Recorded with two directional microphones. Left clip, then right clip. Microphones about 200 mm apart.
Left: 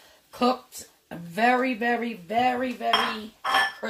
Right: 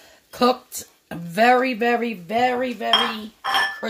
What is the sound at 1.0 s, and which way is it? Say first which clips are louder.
Speech: right 6 dB; 55° right (ahead or behind).